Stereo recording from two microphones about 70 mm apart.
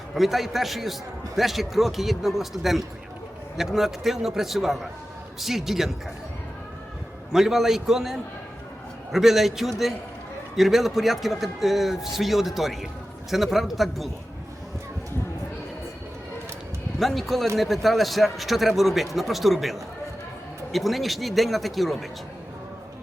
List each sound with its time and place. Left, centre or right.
0.1 s a man's voice: centre
7.3 s a man's voice: centre
17.0 s a man's voice: centre